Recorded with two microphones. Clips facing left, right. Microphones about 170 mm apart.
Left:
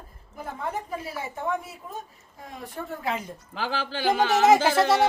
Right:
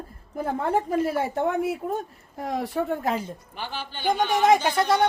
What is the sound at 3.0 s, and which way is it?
Speech, 35° right (ahead or behind).